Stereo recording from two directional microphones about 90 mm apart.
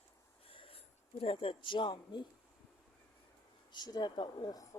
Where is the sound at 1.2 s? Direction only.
80° left; by 2.2 s 60° left (ahead or behind).